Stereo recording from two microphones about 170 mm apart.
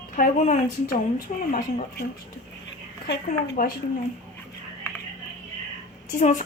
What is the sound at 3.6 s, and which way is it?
Speech, 55° left (ahead or behind).